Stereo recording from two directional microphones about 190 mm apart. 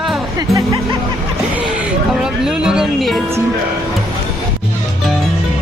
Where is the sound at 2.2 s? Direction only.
5° right (ahead or behind).